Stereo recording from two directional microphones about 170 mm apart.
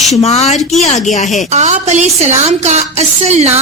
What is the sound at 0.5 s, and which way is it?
Speech, centre (ahead or behind).